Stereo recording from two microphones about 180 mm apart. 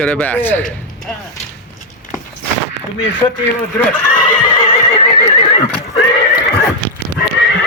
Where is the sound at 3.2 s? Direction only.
30° left (ahead or behind).